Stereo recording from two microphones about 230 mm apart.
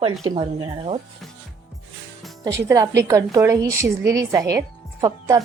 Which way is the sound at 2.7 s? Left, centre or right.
Centre.